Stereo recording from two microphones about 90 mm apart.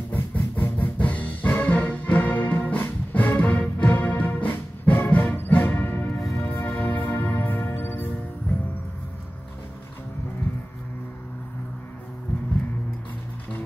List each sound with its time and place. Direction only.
0.1 s music: 20° left (ahead or behind)